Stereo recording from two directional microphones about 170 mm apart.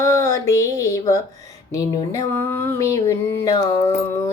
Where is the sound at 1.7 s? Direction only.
20° left (ahead or behind).